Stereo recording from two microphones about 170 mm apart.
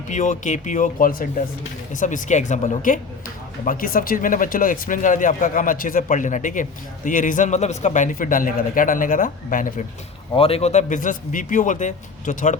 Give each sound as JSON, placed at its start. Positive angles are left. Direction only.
{"t": 0.1, "sound": "speech", "side_deg": 45}
{"t": 10.3, "sound": "speech", "side_deg": 35}